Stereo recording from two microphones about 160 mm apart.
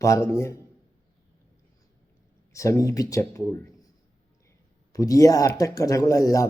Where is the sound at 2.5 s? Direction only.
20° left (ahead or behind).